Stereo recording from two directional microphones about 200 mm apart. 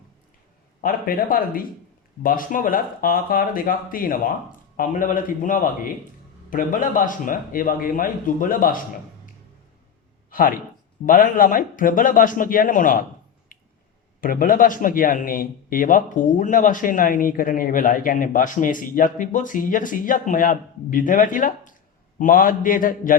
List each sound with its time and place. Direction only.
0.8 s a man's voice: 45° left (ahead or behind)
10.2 s a man's voice: 45° left (ahead or behind)
13.5 s finger snapping: 45° left (ahead or behind)
14.2 s a man's voice: 45° left (ahead or behind)